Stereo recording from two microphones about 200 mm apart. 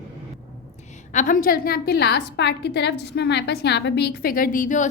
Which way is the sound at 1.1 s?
40° left (ahead or behind).